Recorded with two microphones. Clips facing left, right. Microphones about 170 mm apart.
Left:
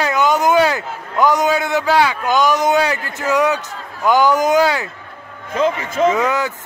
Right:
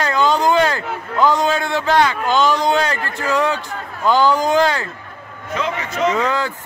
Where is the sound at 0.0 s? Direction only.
15° left (ahead or behind).